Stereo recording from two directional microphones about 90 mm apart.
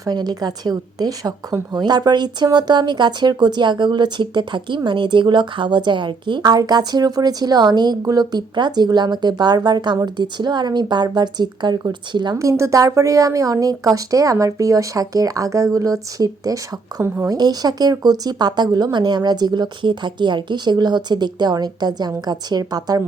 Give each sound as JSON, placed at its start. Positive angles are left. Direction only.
{"t": 0.0, "sound": "speech", "side_deg": -50}
{"t": 12.4, "sound": "speech", "side_deg": -35}